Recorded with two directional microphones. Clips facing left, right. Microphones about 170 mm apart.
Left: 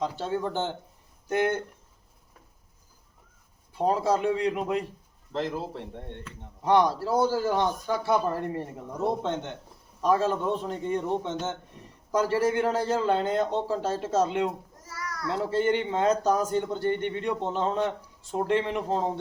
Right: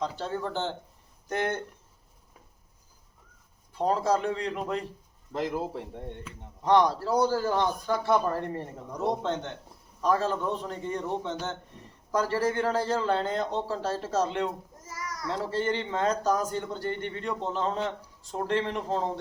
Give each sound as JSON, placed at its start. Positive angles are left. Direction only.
{"t": 0.0, "sound": "speech", "side_deg": 15}
{"t": 3.8, "sound": "speech", "side_deg": 10}
{"t": 5.3, "sound": "speech", "side_deg": -10}
{"t": 6.6, "sound": "speech", "side_deg": 10}
{"t": 14.8, "sound": "a sound", "side_deg": -20}
{"t": 15.3, "sound": "speech", "side_deg": 15}